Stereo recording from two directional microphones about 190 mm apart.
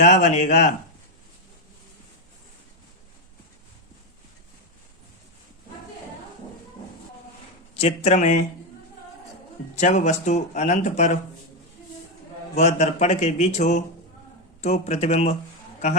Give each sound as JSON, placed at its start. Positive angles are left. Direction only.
{"t": 0.0, "sound": "speech", "side_deg": 40}
{"t": 7.8, "sound": "speech", "side_deg": 35}
{"t": 9.7, "sound": "speech", "side_deg": 40}
{"t": 12.5, "sound": "speech", "side_deg": 35}